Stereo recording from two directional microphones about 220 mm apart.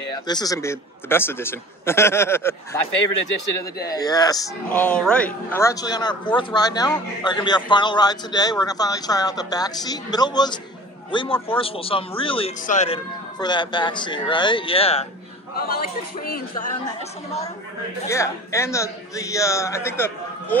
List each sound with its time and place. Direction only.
0.3 s speech: 15° left (ahead or behind)
3.8 s speech: 15° left (ahead or behind)
4.6 s a man's voice: 5° left (ahead or behind); by 13.0 s 30° left (ahead or behind)
13.4 s speech: 20° left (ahead or behind)
16.3 s a man's voice: 40° left (ahead or behind)
18.0 s speech: 15° left (ahead or behind)